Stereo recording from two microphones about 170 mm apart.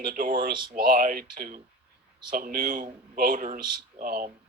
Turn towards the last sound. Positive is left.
turn(degrees=-55)  # may be behind; listen again after turning